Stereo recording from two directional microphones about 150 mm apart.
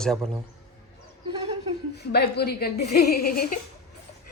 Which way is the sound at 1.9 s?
90° left.